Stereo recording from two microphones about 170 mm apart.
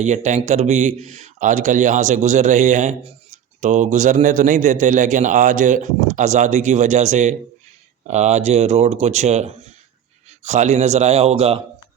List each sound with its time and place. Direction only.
0.0 s speech: 45° right (ahead or behind)